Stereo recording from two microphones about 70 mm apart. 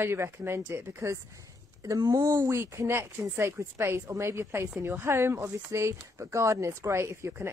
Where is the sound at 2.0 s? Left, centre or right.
Right.